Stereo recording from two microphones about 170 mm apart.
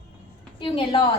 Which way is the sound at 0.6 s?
30° left (ahead or behind).